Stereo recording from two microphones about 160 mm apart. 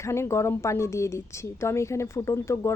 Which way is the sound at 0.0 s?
15° left (ahead or behind).